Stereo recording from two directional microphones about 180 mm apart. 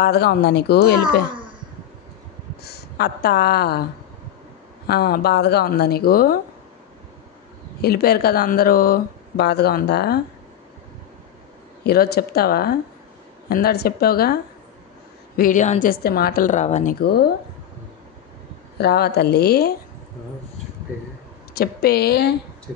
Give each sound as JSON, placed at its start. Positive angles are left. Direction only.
{"t": 0.0, "sound": "speech", "side_deg": 60}
{"t": 2.6, "sound": "speech", "side_deg": 60}
{"t": 4.8, "sound": "speech", "side_deg": 60}
{"t": 7.8, "sound": "speech", "side_deg": 60}
{"t": 11.8, "sound": "speech", "side_deg": 60}
{"t": 15.3, "sound": "a woman's voice", "side_deg": 45}
{"t": 16.9, "sound": "speech", "side_deg": 60}
{"t": 18.8, "sound": "speech", "side_deg": 65}
{"t": 21.5, "sound": "speech", "side_deg": 60}